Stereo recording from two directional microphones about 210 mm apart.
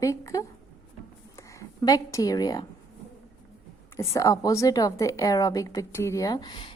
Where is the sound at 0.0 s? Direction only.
15° left (ahead or behind).